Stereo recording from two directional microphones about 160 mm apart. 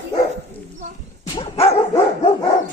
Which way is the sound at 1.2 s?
25° left (ahead or behind).